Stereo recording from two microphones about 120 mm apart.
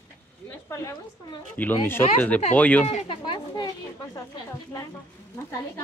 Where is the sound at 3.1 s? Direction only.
45° left (ahead or behind).